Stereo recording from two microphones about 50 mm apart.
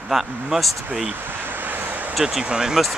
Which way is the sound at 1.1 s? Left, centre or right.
Right.